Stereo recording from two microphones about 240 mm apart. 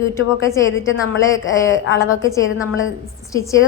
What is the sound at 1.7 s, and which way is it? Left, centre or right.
Speech, left.